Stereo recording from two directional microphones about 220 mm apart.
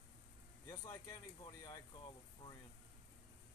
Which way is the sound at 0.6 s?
15° left (ahead or behind).